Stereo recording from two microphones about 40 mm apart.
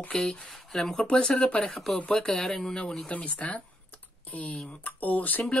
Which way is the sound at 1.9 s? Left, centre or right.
Left.